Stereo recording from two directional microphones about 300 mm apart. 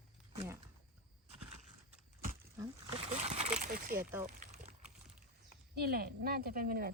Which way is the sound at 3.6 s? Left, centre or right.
Right.